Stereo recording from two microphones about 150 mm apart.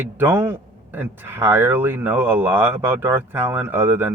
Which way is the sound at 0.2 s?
15° right (ahead or behind).